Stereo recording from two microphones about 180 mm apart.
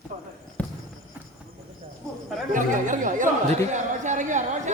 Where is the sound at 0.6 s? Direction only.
10° left (ahead or behind).